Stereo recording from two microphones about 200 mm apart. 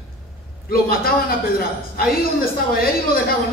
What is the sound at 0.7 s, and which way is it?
A man's voice, 50° left (ahead or behind).